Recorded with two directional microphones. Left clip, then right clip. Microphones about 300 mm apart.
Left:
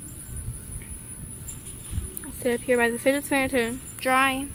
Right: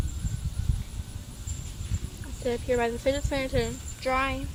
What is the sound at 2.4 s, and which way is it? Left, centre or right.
Speech, left.